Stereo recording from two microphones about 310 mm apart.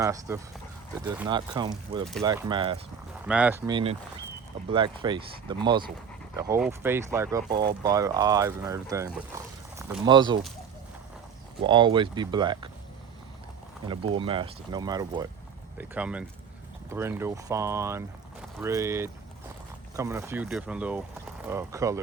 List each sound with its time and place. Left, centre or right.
0.0 s speech: centre
3.2 s speech: centre
7.5 s speech: right
7.8 s speech: centre
11.6 s speech: centre
13.8 s speech: centre